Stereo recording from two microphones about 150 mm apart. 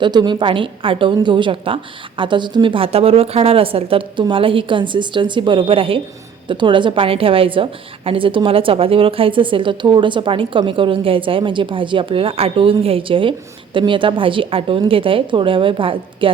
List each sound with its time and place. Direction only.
0.0 s a woman's voice: 30° right (ahead or behind)